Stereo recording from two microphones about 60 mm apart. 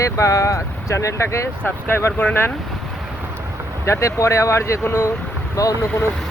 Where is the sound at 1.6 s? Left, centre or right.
Left.